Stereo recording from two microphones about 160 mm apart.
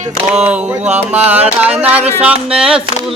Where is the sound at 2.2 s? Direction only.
5° right (ahead or behind).